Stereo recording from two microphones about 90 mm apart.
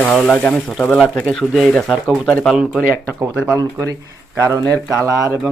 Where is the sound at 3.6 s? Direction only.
40° right (ahead or behind).